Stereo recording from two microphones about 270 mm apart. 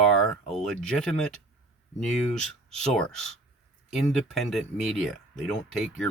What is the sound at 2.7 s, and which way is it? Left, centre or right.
Speech, centre.